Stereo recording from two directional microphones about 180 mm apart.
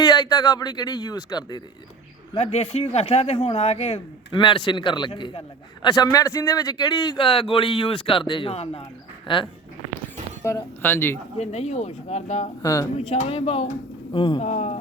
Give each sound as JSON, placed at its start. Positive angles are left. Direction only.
{"t": 0.0, "sound": "a man's voice", "side_deg": 20}
{"t": 2.3, "sound": "a man's voice", "side_deg": 35}
{"t": 10.4, "sound": "speech", "side_deg": 15}
{"t": 11.3, "sound": "speech", "side_deg": 35}
{"t": 12.6, "sound": "speech", "side_deg": 15}
{"t": 13.0, "sound": "a man's voice", "side_deg": 35}
{"t": 14.4, "sound": "speech", "side_deg": 40}